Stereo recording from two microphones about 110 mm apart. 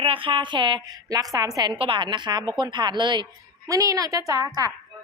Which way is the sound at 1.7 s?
50° right (ahead or behind).